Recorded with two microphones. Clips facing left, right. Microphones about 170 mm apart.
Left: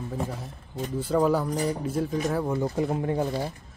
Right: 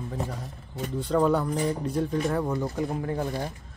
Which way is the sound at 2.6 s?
20° left (ahead or behind).